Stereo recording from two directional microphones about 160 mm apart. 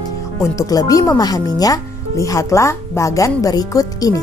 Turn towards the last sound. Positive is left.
turn(degrees=20)  # may be behind; listen again after turning